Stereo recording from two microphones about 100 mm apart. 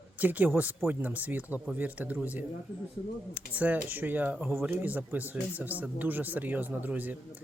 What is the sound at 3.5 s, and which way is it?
Speech, 15° right (ahead or behind).